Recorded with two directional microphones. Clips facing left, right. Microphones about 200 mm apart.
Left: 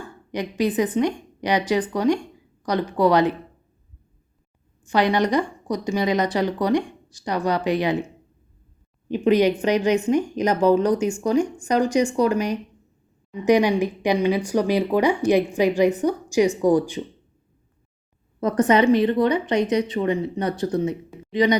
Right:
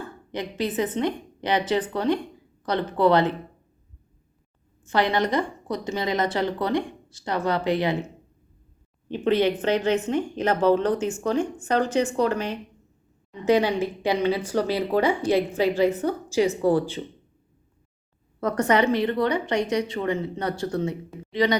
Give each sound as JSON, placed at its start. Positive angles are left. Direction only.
{"t": 0.3, "sound": "speech", "side_deg": 15}
{"t": 4.8, "sound": "speech", "side_deg": 15}
{"t": 18.3, "sound": "a woman's voice", "side_deg": 20}